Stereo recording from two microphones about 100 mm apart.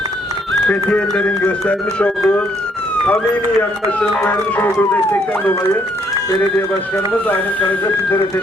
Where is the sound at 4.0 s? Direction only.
20° left (ahead or behind).